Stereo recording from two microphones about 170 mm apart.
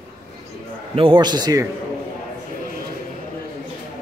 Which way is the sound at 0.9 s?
30° right (ahead or behind).